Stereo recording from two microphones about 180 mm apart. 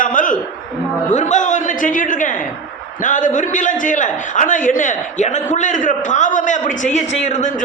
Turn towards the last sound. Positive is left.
turn(degrees=45)  # may be behind; listen again after turning